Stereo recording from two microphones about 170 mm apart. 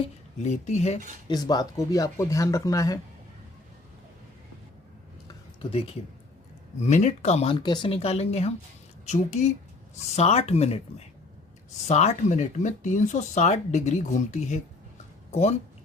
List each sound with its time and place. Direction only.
0.4 s speech: 40° left (ahead or behind)
1.3 s speech: 25° left (ahead or behind)
5.3 s a sound: 35° left (ahead or behind)
6.8 s speech: 40° left (ahead or behind)